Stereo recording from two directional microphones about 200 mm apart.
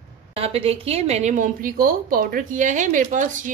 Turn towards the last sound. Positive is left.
turn(degrees=-40)  # may be behind; listen again after turning